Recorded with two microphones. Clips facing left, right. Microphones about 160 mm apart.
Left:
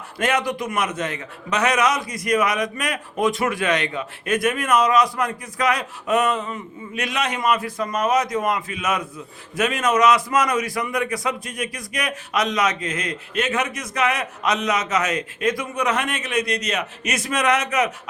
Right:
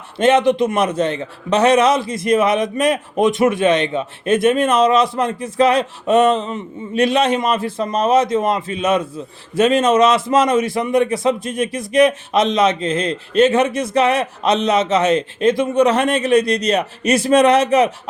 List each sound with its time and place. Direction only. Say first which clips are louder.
0.2 s a man's voice: right 9 dB; 25° right (ahead or behind)